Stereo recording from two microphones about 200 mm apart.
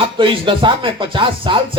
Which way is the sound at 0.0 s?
25° right (ahead or behind).